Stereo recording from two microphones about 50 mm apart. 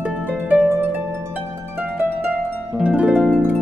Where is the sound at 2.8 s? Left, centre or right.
Right.